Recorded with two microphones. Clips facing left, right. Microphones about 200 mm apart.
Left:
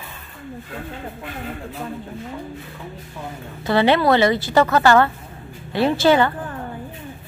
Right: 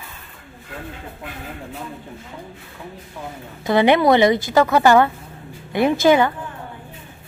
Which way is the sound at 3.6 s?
15° right (ahead or behind).